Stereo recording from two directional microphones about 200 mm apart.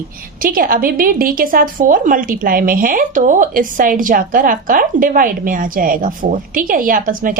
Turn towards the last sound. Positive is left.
turn(degrees=-45)  # may be behind; listen again after turning